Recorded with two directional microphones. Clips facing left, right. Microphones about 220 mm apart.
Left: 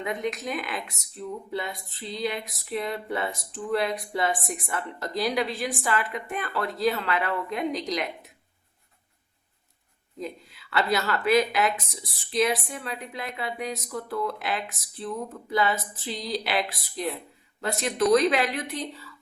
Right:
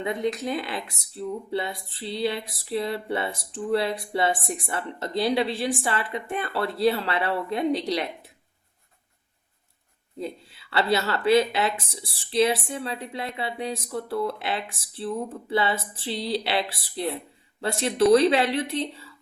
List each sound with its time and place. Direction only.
0.0 s speech: 30° right (ahead or behind)
10.2 s speech: 30° right (ahead or behind)